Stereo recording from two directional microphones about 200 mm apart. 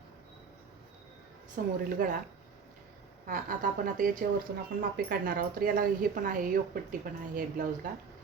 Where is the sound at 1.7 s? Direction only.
45° right (ahead or behind).